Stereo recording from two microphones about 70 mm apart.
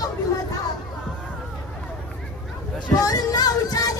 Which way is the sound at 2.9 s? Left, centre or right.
Left.